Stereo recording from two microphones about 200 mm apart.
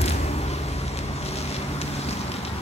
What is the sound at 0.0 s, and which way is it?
Vehicle, 30° left (ahead or behind).